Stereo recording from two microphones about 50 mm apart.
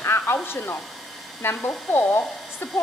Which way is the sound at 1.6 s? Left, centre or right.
Left.